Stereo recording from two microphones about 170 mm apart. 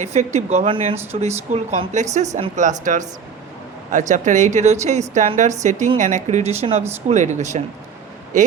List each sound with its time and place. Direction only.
0.0 s speech: 40° right (ahead or behind)